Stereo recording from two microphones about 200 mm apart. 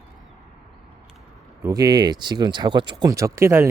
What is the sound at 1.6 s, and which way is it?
Speech, 20° right (ahead or behind).